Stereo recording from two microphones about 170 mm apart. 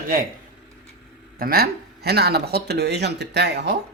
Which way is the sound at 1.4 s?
60° right (ahead or behind).